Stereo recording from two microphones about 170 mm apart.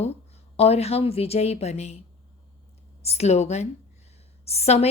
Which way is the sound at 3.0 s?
40° left (ahead or behind).